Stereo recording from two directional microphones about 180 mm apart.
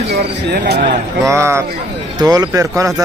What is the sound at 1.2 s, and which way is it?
Speech, 15° right (ahead or behind).